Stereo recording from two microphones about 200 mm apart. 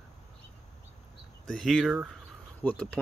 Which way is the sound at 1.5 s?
Centre (ahead or behind).